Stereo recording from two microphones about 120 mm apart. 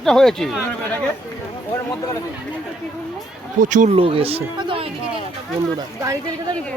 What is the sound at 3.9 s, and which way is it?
Speech, 50° right (ahead or behind).